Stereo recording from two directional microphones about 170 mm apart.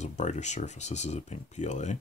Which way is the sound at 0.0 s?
45° left (ahead or behind).